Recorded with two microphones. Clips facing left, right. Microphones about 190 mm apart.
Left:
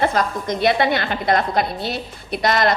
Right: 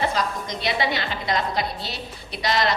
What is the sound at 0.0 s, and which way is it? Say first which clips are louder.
A woman's voice: left 5 dB; 55° left (ahead or behind).